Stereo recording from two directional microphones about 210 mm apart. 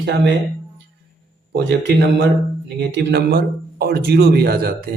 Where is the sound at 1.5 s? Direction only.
55° right (ahead or behind).